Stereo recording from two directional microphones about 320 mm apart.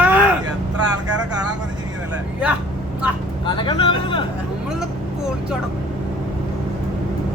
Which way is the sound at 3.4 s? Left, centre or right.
Centre.